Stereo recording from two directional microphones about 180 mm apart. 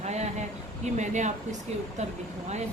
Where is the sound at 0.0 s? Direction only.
40° right (ahead or behind).